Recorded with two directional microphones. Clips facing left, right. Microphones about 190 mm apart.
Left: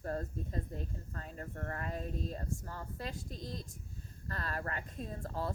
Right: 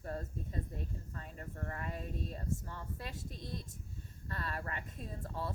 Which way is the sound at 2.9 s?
Centre (ahead or behind).